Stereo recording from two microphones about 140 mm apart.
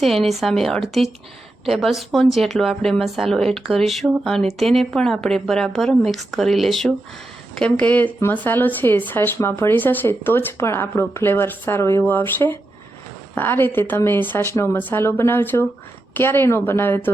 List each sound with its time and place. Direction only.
0.0 s a woman's voice: centre (ahead or behind)